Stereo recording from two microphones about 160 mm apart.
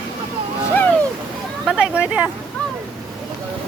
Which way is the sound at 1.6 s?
5° right (ahead or behind).